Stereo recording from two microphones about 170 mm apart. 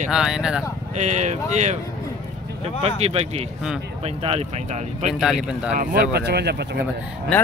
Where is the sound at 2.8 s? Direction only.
35° right (ahead or behind).